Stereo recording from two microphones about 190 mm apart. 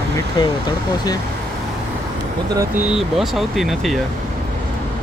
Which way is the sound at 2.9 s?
Centre (ahead or behind).